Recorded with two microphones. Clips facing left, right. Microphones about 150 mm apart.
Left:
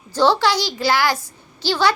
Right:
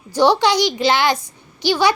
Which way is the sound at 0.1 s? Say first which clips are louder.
Right 2 dB; 15° right (ahead or behind).